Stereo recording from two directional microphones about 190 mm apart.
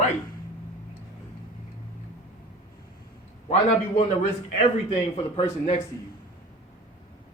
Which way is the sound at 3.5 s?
35° left (ahead or behind).